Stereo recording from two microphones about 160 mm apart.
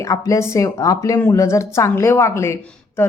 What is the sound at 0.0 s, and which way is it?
Speech, 20° left (ahead or behind).